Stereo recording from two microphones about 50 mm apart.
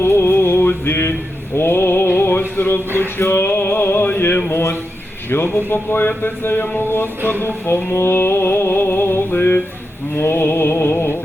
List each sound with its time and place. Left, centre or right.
0.0 s music: left
1.5 s a sound: left
3.2 s speech: left
7.9 s a sound: left
9.3 s speech: left
10.2 s mantra: left